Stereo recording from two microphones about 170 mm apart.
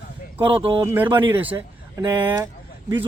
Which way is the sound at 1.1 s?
30° right (ahead or behind).